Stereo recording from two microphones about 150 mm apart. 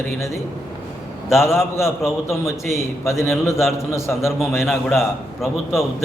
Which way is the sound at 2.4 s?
20° left (ahead or behind).